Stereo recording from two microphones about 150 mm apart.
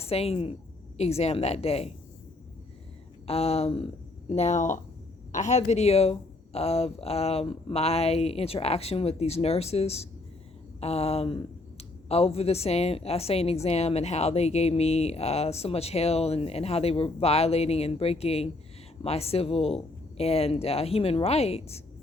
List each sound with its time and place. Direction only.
0.0 s a woman's voice: 40° left (ahead or behind)
3.2 s a woman's voice: 45° left (ahead or behind)